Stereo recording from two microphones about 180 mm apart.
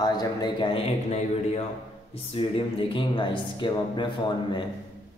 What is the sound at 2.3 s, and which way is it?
Speech, 30° left (ahead or behind).